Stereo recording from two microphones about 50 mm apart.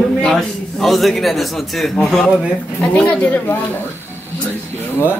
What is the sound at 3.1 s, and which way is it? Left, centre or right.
Speech, left.